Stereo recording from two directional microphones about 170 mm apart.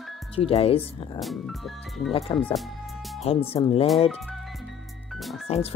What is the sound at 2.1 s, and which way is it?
Speech, 35° left (ahead or behind).